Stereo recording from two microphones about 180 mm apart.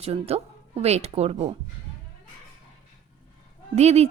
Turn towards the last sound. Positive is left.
turn(degrees=-35)  # may be behind; listen again after turning